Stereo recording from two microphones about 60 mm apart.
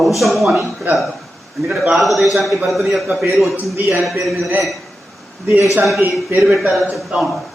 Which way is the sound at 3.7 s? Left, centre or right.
Right.